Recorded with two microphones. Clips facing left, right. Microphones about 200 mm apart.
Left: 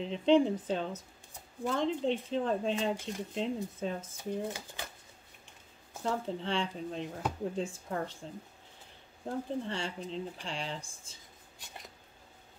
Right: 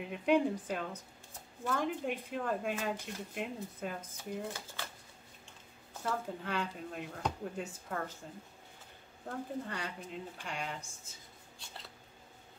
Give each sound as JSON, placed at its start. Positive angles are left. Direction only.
{"t": 0.0, "sound": "speech", "side_deg": 25}
{"t": 4.5, "sound": "speech", "side_deg": 15}
{"t": 6.0, "sound": "speech", "side_deg": 25}
{"t": 9.2, "sound": "speech", "side_deg": 25}
{"t": 11.5, "sound": "a sound", "side_deg": 15}